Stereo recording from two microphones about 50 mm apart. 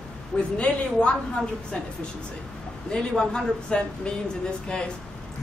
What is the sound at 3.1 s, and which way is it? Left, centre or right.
A man's voice, centre.